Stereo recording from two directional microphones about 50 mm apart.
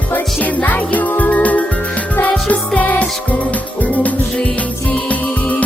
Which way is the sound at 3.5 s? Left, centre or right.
Left.